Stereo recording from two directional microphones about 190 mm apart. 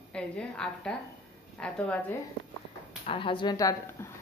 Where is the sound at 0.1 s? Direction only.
5° left (ahead or behind).